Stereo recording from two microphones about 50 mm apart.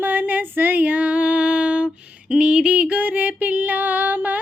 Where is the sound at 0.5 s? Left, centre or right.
Right.